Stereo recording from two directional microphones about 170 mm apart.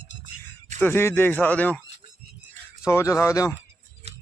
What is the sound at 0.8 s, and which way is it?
A man's voice, 15° left (ahead or behind).